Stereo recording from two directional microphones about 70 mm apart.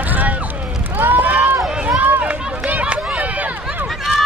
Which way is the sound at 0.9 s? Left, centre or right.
Right.